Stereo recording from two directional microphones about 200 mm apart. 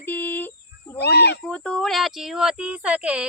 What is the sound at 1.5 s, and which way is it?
Speech, 5° left (ahead or behind).